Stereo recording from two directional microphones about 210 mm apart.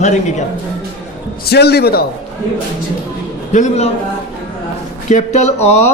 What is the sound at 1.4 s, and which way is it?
Speech, 50° left (ahead or behind).